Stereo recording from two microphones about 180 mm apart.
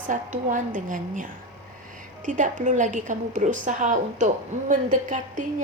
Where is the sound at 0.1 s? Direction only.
45° right (ahead or behind).